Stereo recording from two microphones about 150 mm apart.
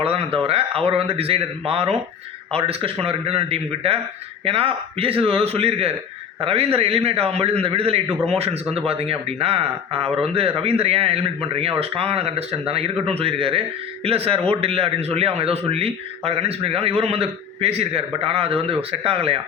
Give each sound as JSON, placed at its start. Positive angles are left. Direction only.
{"t": 0.0, "sound": "a man's voice", "side_deg": -40}